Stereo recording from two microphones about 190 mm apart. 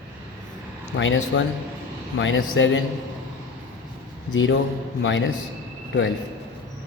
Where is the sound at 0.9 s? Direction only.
90° left.